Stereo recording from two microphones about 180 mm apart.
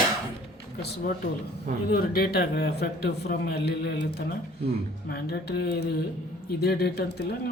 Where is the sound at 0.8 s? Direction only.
65° left (ahead or behind).